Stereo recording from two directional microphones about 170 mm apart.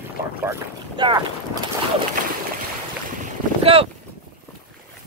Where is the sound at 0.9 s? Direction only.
25° right (ahead or behind).